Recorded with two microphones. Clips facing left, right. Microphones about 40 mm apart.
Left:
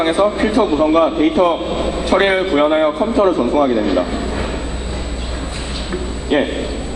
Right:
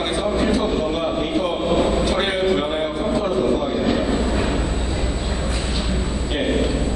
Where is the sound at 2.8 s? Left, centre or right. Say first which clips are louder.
Left 7 dB; left.